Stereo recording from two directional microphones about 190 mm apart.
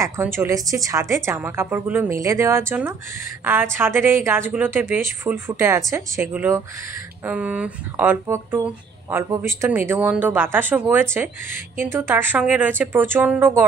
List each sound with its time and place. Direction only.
0.0 s a woman's voice: 10° right (ahead or behind)